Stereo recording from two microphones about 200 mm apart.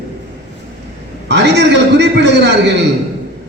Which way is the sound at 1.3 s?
60° right (ahead or behind).